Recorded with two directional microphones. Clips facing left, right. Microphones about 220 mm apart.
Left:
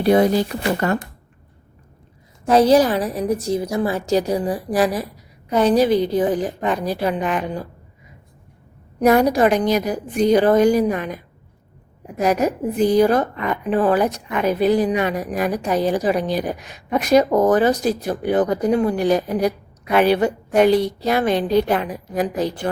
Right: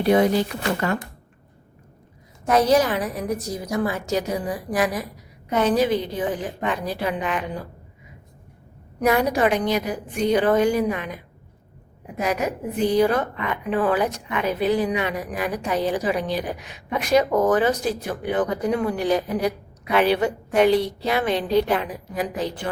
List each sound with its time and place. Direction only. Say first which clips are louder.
0.0 s a woman's voice: left 3 dB; 35° left (ahead or behind)
2.5 s a woman's voice: left 4 dB; 30° left (ahead or behind)
9.0 s a woman's voice: left 5 dB; 40° left (ahead or behind)
12.2 s a woman's voice: left 6 dB; 40° left (ahead or behind)